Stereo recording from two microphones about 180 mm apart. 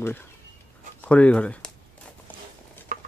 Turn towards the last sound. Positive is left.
turn(degrees=-50)  # may be behind; listen again after turning